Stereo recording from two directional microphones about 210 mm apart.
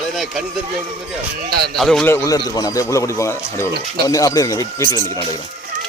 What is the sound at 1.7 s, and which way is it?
A man's voice, centre (ahead or behind).